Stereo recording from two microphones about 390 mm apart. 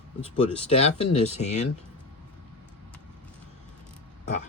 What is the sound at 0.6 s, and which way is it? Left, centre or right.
A man's voice, centre.